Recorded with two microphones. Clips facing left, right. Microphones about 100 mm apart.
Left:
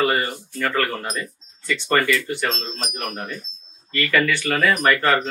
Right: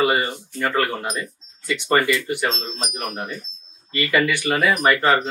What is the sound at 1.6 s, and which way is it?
Speech, 15° right (ahead or behind).